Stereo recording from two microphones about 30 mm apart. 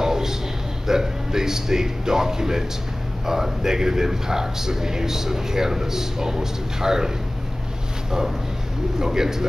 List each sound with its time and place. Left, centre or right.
0.0 s a sound: centre
0.8 s a man's voice: centre
9.0 s a man's voice: centre